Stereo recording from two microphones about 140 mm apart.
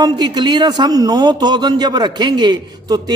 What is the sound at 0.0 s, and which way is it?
Speech, 30° right (ahead or behind).